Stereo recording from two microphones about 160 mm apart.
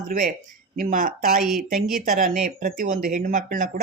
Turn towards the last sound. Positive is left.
turn(degrees=-55)  # may be behind; listen again after turning